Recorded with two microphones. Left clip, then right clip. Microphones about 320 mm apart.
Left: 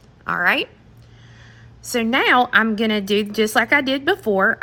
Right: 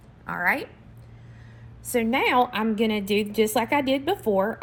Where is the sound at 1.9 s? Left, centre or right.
Left.